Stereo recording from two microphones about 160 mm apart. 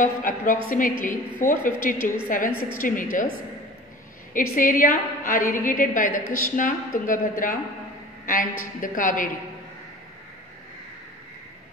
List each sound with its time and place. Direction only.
0.0 s a woman's voice: 55° left (ahead or behind)
4.3 s a woman's voice: 55° left (ahead or behind)